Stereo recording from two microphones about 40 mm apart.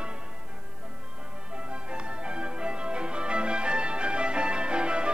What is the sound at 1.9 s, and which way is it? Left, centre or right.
Music, right.